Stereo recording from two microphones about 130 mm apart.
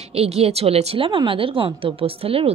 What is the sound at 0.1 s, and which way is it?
A woman's voice, 50° right (ahead or behind).